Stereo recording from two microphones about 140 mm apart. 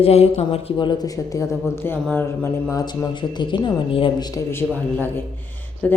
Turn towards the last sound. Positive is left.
turn(degrees=10)  # may be behind; listen again after turning